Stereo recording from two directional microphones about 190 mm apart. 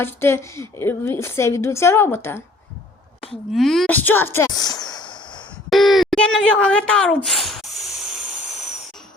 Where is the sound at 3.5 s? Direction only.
Centre (ahead or behind); by 5.5 s 25° left (ahead or behind).